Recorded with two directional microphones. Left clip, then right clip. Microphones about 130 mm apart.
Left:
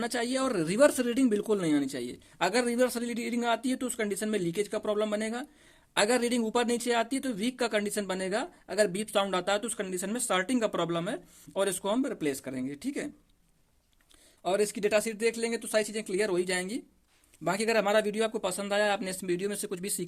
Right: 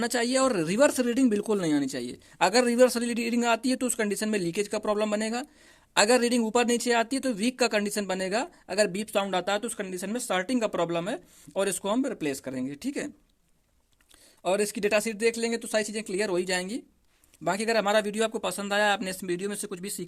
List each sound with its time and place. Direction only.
0.0 s speech: 40° right (ahead or behind)
14.4 s speech: 40° right (ahead or behind)
17.4 s speech: 20° right (ahead or behind)